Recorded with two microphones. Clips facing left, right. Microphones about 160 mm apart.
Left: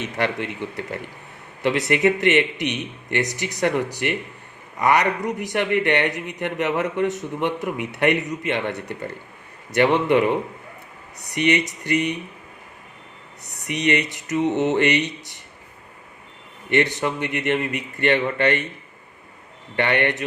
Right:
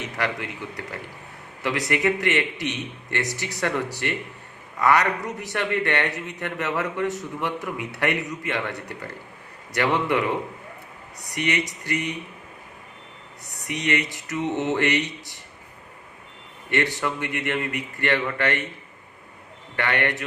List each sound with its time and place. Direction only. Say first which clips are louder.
0.0 s a man's voice: left 4 dB; 25° left (ahead or behind)
11.3 s a man's voice: left 5 dB; 20° left (ahead or behind)
13.7 s a man's voice: left 4 dB; 20° left (ahead or behind)
16.6 s a man's voice: left 4 dB; 20° left (ahead or behind)
19.7 s a man's voice: left 4 dB; 20° left (ahead or behind)